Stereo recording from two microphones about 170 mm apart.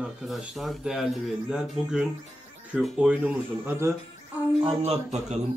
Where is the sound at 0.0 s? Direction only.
Centre (ahead or behind).